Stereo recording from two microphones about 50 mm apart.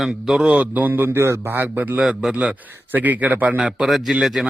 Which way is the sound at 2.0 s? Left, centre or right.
Right.